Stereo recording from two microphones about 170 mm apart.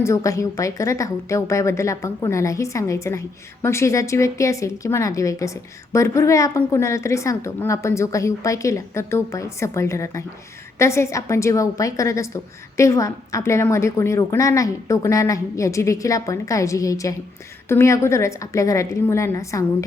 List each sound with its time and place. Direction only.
0.0 s a woman's voice: 20° left (ahead or behind)